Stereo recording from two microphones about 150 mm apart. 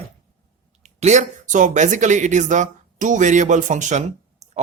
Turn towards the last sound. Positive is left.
turn(degrees=-50)  # may be behind; listen again after turning